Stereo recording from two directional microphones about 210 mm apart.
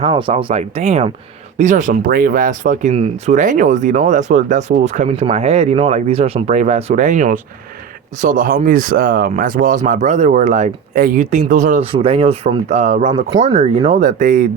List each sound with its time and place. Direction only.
0.0 s speech: 25° right (ahead or behind); by 14.4 s 40° right (ahead or behind)